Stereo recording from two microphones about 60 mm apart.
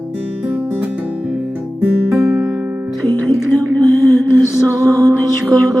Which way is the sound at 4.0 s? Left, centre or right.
Left.